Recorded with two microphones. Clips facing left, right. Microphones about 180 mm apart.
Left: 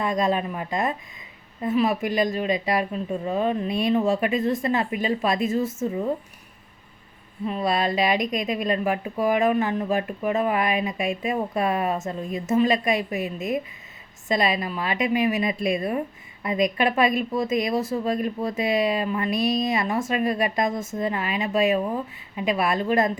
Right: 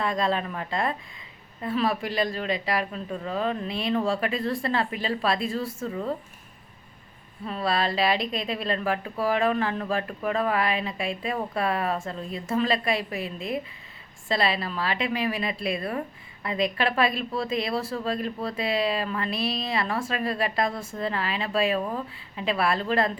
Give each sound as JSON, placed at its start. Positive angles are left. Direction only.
{"t": 0.0, "sound": "speech", "side_deg": 20}
{"t": 7.4, "sound": "speech", "side_deg": 15}
{"t": 14.3, "sound": "speech", "side_deg": 15}
{"t": 19.4, "sound": "a woman's voice", "side_deg": 45}
{"t": 19.6, "sound": "speech", "side_deg": 20}